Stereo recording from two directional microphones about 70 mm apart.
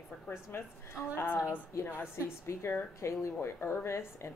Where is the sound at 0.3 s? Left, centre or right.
Left.